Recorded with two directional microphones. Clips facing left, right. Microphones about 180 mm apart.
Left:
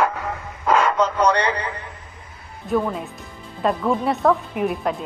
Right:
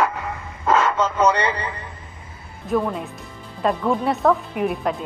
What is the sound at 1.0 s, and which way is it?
Speech, 5° right (ahead or behind).